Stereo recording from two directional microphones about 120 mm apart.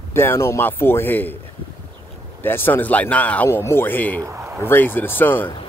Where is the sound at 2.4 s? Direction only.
15° left (ahead or behind).